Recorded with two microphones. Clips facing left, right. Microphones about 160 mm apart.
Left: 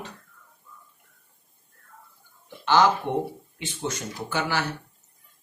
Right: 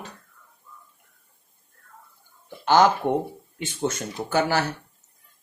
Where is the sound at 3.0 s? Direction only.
40° right (ahead or behind).